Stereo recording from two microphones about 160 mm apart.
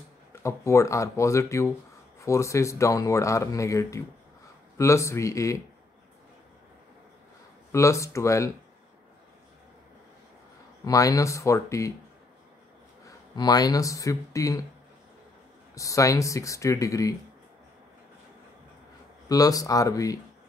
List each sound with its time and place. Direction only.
0.3 s speech: 15° left (ahead or behind)
7.7 s speech: 20° left (ahead or behind)
10.9 s speech: 20° left (ahead or behind)
13.0 s speech: 25° left (ahead or behind)
15.7 s speech: 20° left (ahead or behind)
19.2 s speech: 20° left (ahead or behind)